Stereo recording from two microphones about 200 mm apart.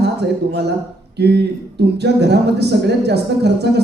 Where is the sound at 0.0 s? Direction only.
55° right (ahead or behind).